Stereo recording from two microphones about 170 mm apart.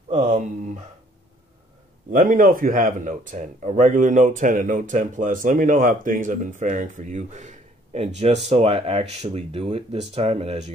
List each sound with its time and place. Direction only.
0.1 s speech: 45° right (ahead or behind)
2.0 s speech: 55° right (ahead or behind); by 10.7 s 35° right (ahead or behind)